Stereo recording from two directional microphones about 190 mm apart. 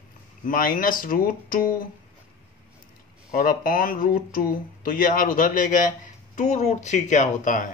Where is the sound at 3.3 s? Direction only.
45° left (ahead or behind).